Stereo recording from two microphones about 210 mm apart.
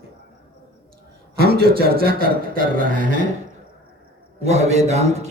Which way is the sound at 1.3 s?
50° right (ahead or behind).